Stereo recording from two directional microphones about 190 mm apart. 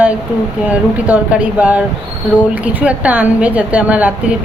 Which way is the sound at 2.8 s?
5° right (ahead or behind).